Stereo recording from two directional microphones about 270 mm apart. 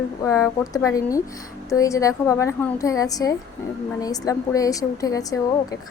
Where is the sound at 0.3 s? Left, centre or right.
Centre.